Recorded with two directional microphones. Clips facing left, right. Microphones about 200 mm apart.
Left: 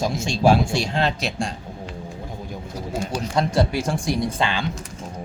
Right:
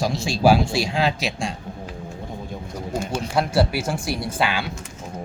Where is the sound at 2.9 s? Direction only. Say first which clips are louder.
Right 1 dB; 10° right (ahead or behind).